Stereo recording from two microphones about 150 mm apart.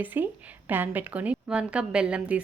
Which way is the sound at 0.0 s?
10° right (ahead or behind).